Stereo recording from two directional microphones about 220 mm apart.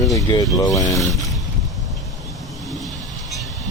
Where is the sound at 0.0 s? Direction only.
15° left (ahead or behind).